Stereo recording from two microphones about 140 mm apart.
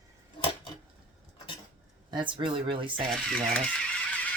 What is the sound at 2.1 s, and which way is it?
Speech, 35° right (ahead or behind).